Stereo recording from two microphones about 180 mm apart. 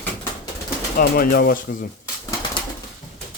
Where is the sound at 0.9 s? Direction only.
55° left (ahead or behind).